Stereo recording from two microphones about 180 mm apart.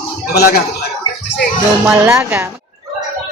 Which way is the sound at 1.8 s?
5° right (ahead or behind).